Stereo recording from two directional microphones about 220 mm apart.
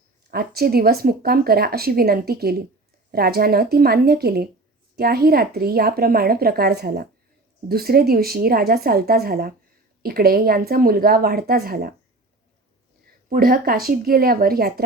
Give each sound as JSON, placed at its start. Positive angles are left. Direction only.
{"t": 0.3, "sound": "speech", "side_deg": -45}
{"t": 13.3, "sound": "speech", "side_deg": -40}